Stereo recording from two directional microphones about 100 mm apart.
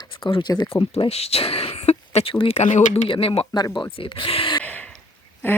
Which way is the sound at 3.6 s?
50° left (ahead or behind).